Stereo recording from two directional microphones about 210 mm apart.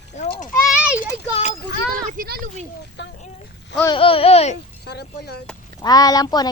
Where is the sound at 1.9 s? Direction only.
40° right (ahead or behind).